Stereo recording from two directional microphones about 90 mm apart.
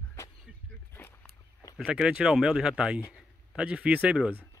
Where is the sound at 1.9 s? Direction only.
10° right (ahead or behind).